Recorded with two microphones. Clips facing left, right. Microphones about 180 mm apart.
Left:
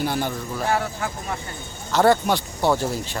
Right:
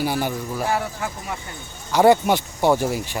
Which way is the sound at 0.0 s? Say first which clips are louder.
Right 1 dB; 10° right (ahead or behind).